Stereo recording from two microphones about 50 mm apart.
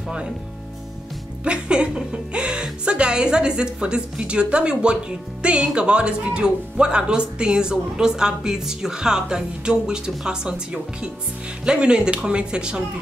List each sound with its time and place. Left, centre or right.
1.4 s speech: centre